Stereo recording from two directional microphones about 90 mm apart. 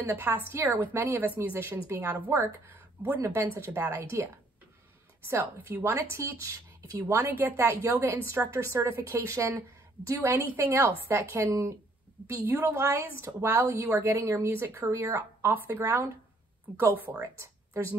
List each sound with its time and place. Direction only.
0.0 s a woman's voice: 25° right (ahead or behind)
5.3 s a woman's voice: 25° right (ahead or behind)
12.4 s a woman's voice: 25° right (ahead or behind)
17.2 s speech: 30° right (ahead or behind)